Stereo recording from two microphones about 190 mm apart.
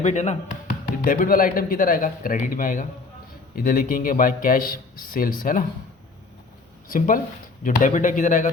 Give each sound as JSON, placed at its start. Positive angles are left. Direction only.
{"t": 0.0, "sound": "speech", "side_deg": 40}
{"t": 6.8, "sound": "speech", "side_deg": 45}